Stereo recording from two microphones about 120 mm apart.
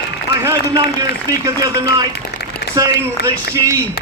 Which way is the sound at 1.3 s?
30° right (ahead or behind).